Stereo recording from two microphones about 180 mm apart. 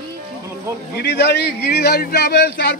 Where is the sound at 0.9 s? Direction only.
65° left (ahead or behind).